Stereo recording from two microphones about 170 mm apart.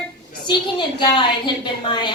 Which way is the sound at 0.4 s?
25° left (ahead or behind).